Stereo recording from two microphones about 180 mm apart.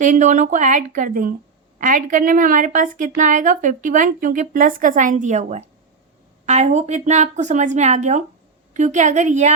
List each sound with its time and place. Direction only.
0.0 s a woman's voice: 45° right (ahead or behind)